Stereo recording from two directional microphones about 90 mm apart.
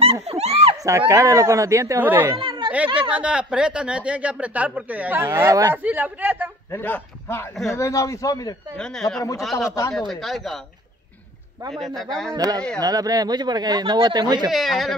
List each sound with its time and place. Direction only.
0.0 s a sound: 90° right
0.7 s speech: 35° right (ahead or behind)
2.0 s speech: 20° right (ahead or behind)
2.3 s a sound: 70° right (ahead or behind)
3.1 s speech: 10° right (ahead or behind)
5.3 s speech: 40° right (ahead or behind)
5.8 s speech: 15° right (ahead or behind)
6.7 s a man's voice: 20° left (ahead or behind)
7.2 s a man's voice: 30° left (ahead or behind)
8.7 s speech: 10° left (ahead or behind)
11.7 s speech: centre (ahead or behind)
12.4 s speech: 45° right (ahead or behind)
14.5 s speech: centre (ahead or behind)